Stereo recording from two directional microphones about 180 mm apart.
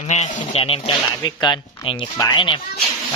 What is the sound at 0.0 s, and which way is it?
Speech, 40° left (ahead or behind).